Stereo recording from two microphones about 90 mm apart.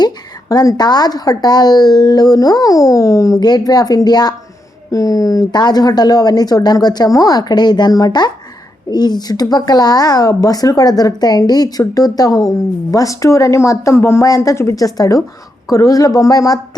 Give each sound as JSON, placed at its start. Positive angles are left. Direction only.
{"t": 0.0, "sound": "speech", "side_deg": 45}
{"t": 3.4, "sound": "a woman's voice", "side_deg": 50}